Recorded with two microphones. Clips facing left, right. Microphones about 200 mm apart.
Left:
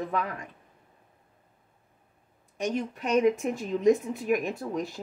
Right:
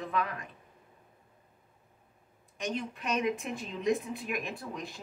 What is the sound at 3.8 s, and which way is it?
A woman's voice, 45° left (ahead or behind).